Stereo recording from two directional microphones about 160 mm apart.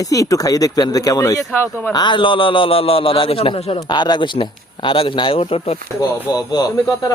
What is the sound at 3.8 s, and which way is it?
A man's voice, 25° left (ahead or behind).